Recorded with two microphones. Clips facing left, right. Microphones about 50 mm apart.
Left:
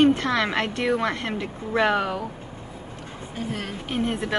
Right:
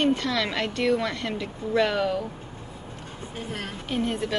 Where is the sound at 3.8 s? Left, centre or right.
Left.